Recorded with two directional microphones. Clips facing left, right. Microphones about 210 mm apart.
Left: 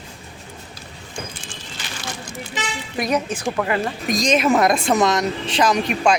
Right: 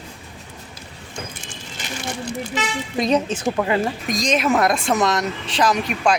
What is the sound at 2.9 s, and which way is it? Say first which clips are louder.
Speech: right 2 dB; 25° right (ahead or behind).